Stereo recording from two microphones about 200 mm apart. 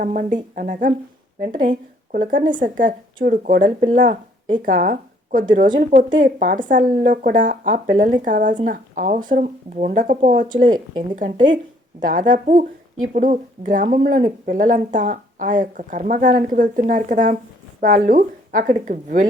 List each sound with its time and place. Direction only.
0.0 s a woman's voice: 40° right (ahead or behind)